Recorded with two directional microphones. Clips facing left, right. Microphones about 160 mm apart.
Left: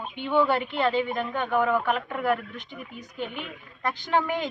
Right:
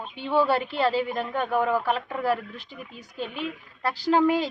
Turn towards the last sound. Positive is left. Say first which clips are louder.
# right 5 dB
turn(degrees=-30)  # may be behind; listen again after turning